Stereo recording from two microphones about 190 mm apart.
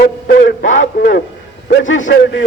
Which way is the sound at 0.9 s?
55° left (ahead or behind).